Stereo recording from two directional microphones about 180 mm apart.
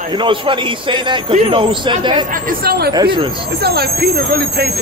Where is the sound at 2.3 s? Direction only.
55° right (ahead or behind).